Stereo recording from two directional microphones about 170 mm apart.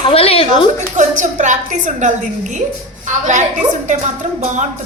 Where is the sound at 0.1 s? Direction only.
35° left (ahead or behind).